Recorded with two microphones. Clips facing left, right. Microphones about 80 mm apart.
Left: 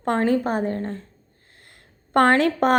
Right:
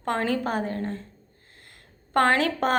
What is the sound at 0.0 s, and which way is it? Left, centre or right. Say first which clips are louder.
A woman's voice: left 5 dB; left.